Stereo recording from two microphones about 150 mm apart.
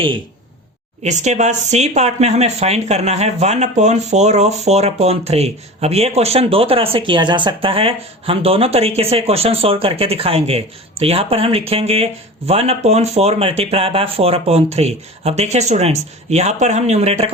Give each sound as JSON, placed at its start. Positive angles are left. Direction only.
{"t": 1.0, "sound": "speech", "side_deg": -50}